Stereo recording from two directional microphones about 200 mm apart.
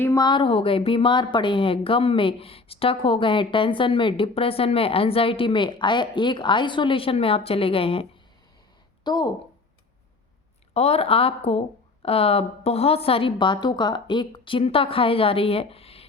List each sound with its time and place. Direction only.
0.0 s a woman's voice: 15° left (ahead or behind)
9.0 s a woman's voice: 20° left (ahead or behind)
10.8 s a woman's voice: 30° left (ahead or behind)